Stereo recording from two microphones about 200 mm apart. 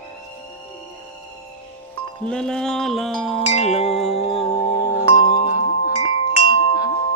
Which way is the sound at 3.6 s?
35° left (ahead or behind).